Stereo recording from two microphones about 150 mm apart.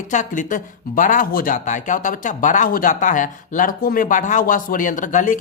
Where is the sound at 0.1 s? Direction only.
55° left (ahead or behind).